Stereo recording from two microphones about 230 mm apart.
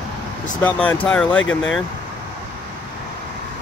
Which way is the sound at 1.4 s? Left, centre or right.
Left.